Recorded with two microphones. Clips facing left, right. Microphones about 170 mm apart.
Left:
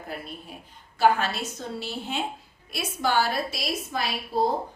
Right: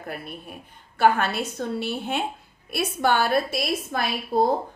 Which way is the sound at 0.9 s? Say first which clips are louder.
Right 2 dB; 55° right (ahead or behind).